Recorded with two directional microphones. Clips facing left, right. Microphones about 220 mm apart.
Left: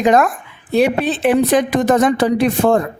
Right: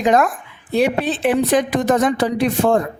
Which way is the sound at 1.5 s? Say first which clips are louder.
Left 2 dB; 60° left (ahead or behind).